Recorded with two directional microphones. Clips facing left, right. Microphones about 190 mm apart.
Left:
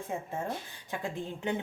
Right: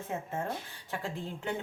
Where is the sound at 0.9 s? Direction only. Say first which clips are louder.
Left 1 dB; 15° left (ahead or behind).